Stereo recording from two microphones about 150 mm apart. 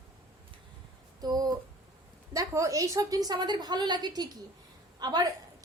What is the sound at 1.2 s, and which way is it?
A woman's voice, 25° right (ahead or behind).